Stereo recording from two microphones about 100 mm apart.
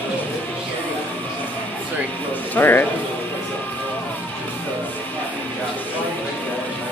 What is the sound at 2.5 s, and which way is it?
Speech, 20° left (ahead or behind).